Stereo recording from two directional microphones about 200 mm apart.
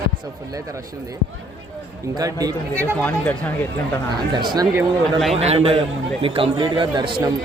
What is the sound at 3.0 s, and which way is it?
Speech, 10° left (ahead or behind).